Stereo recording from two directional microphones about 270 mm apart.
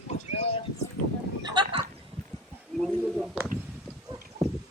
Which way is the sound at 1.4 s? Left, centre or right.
Centre.